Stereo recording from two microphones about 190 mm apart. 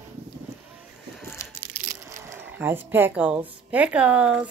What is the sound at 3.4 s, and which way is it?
Speech, 10° right (ahead or behind).